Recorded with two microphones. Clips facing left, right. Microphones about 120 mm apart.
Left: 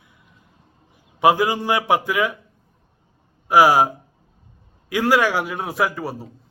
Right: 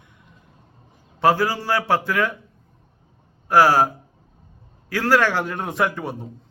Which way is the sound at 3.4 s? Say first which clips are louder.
Left 1 dB; 10° left (ahead or behind).